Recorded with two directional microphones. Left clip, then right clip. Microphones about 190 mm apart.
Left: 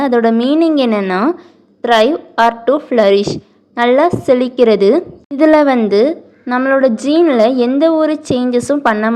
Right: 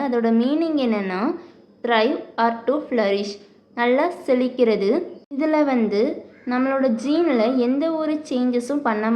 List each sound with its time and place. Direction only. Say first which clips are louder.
0.0 s a woman's voice: left 8 dB; 40° left (ahead or behind)